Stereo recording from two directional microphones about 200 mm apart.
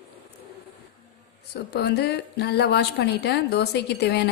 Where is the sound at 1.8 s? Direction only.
55° left (ahead or behind).